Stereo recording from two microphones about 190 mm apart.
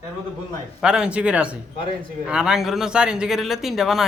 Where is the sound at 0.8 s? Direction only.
5° right (ahead or behind).